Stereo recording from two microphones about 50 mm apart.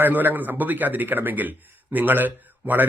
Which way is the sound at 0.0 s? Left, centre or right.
Right.